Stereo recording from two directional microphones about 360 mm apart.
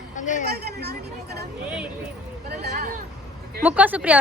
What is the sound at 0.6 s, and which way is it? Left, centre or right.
Speech, right.